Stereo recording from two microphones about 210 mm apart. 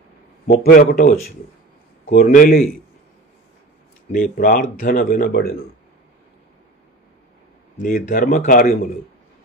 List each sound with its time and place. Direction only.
0.5 s speech: 45° left (ahead or behind)
4.1 s speech: 45° left (ahead or behind)
7.7 s speech: 40° left (ahead or behind)